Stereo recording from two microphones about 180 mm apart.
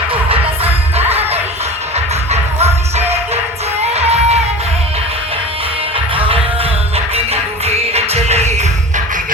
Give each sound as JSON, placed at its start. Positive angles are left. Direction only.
{"t": 1.1, "sound": "music", "side_deg": -35}
{"t": 3.9, "sound": "music", "side_deg": -35}
{"t": 6.1, "sound": "music", "side_deg": -30}
{"t": 7.6, "sound": "music", "side_deg": -35}